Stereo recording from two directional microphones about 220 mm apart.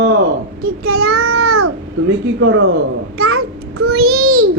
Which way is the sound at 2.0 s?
65° right (ahead or behind).